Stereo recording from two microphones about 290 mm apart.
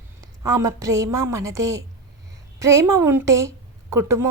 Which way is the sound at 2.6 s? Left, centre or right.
Centre.